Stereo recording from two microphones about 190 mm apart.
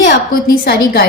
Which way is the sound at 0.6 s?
55° left (ahead or behind).